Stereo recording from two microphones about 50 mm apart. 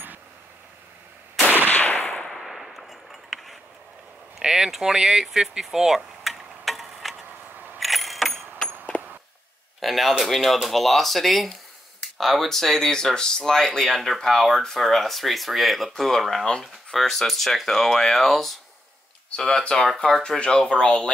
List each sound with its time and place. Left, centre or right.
1.7 s gunshot: left
2.2 s gunshot: centre
4.4 s a sound: centre
7.5 s a sound: right
7.8 s vehicle: centre
9.8 s speech: centre
13.8 s speech: centre
19.3 s speech: centre